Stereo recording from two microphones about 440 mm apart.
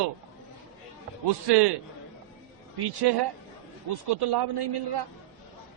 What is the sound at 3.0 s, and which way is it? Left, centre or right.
A man's voice, right.